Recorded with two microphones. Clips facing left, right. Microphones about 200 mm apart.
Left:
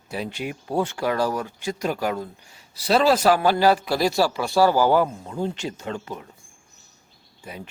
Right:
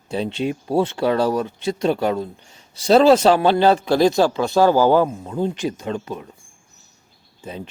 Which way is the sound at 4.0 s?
20° right (ahead or behind).